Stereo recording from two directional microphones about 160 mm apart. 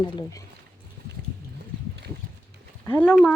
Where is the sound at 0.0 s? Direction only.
30° left (ahead or behind).